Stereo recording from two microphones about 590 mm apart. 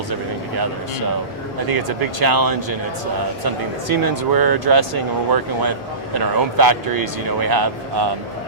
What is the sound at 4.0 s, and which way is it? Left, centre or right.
Speech, right.